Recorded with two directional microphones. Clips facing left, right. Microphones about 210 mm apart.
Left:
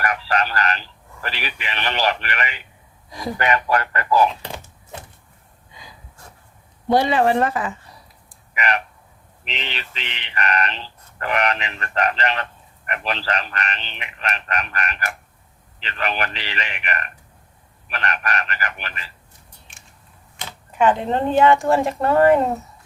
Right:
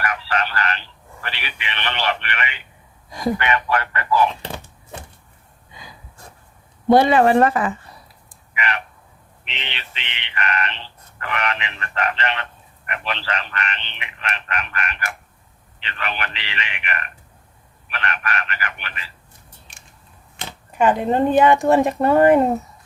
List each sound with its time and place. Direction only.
0.0 s telephone: 40° left (ahead or behind)
3.3 s speech: 40° left (ahead or behind)
6.8 s speech: 55° right (ahead or behind)
8.5 s frog: 40° left (ahead or behind)
9.5 s speech: 40° left (ahead or behind)
19.7 s scissors: 35° right (ahead or behind)
20.7 s speech: 10° right (ahead or behind)